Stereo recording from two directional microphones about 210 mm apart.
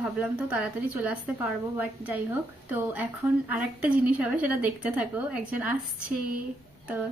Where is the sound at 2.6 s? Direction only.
5° right (ahead or behind).